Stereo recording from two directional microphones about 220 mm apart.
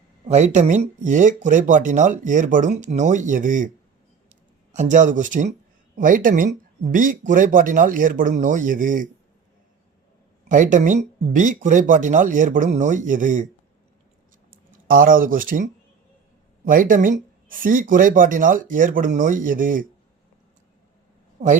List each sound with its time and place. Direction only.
0.3 s speech: 30° right (ahead or behind)
4.7 s speech: 35° right (ahead or behind)
10.5 s speech: 35° right (ahead or behind)
14.5 s speech: 40° right (ahead or behind)